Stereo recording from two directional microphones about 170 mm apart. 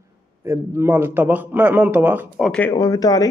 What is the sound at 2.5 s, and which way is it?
Speech, 10° left (ahead or behind).